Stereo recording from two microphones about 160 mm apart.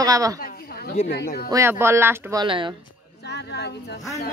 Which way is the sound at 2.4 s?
30° right (ahead or behind).